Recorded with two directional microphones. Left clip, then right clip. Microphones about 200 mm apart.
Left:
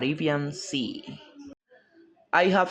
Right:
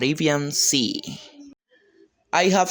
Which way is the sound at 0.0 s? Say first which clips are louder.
Right 5 dB; 45° right (ahead or behind).